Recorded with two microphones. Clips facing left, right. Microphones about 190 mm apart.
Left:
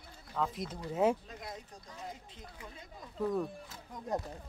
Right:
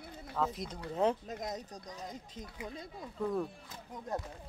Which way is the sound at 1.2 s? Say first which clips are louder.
Right 6 dB; 40° right (ahead or behind).